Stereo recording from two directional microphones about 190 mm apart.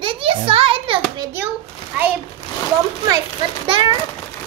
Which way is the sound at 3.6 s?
25° right (ahead or behind).